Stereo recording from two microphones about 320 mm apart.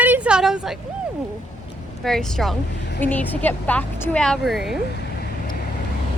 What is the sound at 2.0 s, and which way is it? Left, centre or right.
Speech, centre.